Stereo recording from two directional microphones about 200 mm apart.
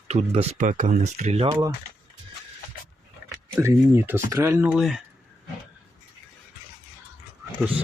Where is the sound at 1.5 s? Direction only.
15° right (ahead or behind).